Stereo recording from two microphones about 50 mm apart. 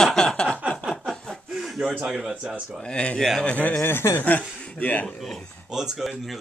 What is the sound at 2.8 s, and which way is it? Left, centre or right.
Speech, centre.